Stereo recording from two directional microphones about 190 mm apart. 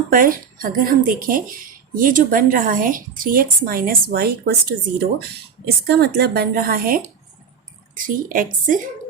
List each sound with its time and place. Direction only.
0.1 s speech: 45° right (ahead or behind)
5.6 s speech: 55° right (ahead or behind)